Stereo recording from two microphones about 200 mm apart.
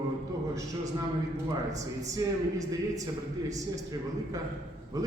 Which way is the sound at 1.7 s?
15° right (ahead or behind).